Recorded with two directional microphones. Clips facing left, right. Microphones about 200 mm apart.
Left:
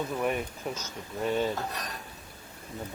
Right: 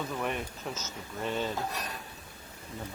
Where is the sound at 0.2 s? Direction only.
10° left (ahead or behind).